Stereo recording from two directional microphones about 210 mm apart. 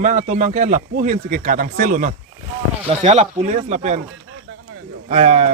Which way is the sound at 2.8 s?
30° right (ahead or behind).